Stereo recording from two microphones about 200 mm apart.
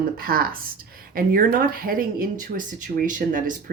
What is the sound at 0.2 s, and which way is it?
Speech, 45° right (ahead or behind).